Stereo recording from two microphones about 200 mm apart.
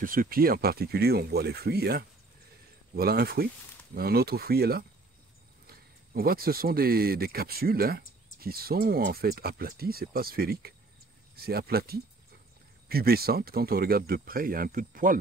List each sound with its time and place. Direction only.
0.0 s speech: 45° right (ahead or behind)